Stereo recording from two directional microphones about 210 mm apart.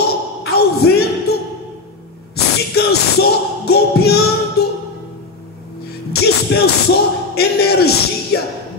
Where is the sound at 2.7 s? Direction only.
50° left (ahead or behind).